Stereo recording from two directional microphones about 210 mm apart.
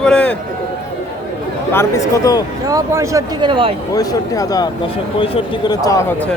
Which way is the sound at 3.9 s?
15° left (ahead or behind).